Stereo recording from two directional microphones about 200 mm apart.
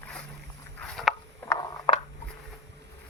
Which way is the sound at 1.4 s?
15° left (ahead or behind).